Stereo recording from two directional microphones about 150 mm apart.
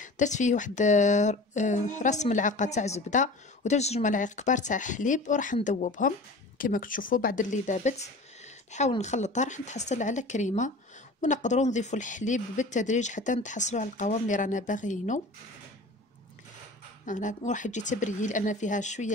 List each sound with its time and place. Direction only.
0.0 s speech: 55° left (ahead or behind)
17.0 s speech: 55° left (ahead or behind)